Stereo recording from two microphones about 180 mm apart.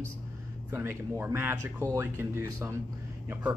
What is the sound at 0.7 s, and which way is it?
Speech, 15° right (ahead or behind).